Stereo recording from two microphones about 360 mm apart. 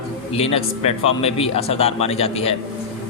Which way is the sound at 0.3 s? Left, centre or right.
Centre.